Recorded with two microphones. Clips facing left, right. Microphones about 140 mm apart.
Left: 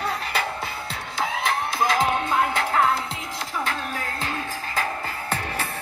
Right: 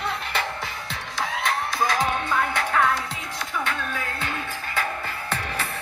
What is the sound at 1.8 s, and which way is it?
Music, 25° left (ahead or behind).